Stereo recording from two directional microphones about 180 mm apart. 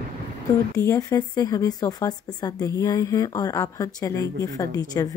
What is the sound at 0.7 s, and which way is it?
Speech, 20° left (ahead or behind).